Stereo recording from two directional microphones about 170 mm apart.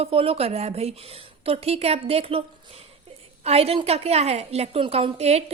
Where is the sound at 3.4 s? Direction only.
35° right (ahead or behind).